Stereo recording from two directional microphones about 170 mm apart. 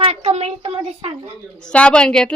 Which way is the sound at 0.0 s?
35° right (ahead or behind).